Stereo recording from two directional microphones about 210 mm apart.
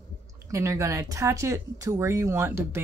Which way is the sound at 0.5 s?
15° right (ahead or behind).